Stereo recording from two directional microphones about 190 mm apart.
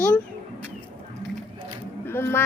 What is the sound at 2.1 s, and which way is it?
Speech, 10° left (ahead or behind).